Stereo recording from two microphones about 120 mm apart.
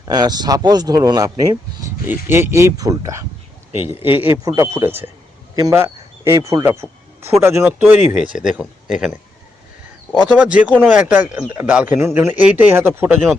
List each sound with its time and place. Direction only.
0.1 s speech: 35° right (ahead or behind)
2.0 s speech: 20° right (ahead or behind)
8.4 s speech: 5° right (ahead or behind)
10.2 s speech: 10° right (ahead or behind)
11.9 s speech: 20° right (ahead or behind)